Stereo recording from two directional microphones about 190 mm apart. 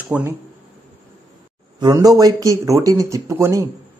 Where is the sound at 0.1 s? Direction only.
10° right (ahead or behind).